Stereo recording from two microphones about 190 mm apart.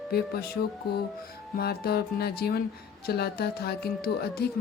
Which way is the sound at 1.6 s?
55° left (ahead or behind).